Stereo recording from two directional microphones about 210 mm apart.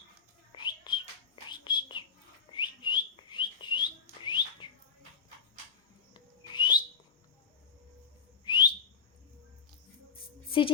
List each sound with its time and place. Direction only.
0.5 s bird: 20° left (ahead or behind)
1.5 s whispering: 20° left (ahead or behind)
2.5 s whistling: 20° left (ahead or behind)
6.1 s whistle: 20° left (ahead or behind)
8.4 s whistle: 20° left (ahead or behind)